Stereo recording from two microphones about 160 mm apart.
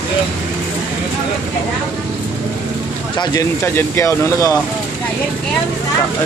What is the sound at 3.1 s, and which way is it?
Speech, 20° left (ahead or behind).